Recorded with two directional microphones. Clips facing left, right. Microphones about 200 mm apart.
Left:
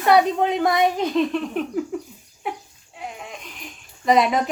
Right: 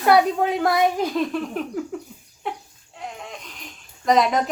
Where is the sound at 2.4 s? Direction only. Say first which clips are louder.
Left 1 dB; 5° left (ahead or behind).